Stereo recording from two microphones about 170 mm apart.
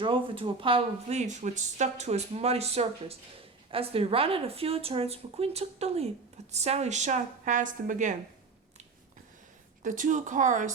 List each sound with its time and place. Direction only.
0.0 s speech: 30° right (ahead or behind); by 8.1 s 50° right (ahead or behind)
9.8 s speech: 50° right (ahead or behind)